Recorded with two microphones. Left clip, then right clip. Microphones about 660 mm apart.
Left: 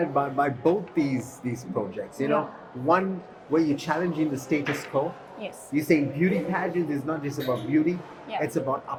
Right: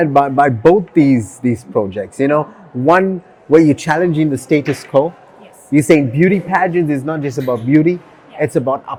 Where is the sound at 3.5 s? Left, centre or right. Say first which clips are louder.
Right 14 dB; right.